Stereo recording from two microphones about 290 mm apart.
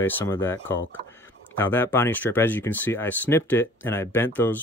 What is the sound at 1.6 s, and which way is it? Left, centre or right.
Speech, centre.